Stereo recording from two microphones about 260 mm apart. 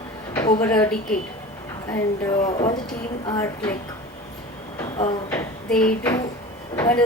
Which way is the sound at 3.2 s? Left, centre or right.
Centre.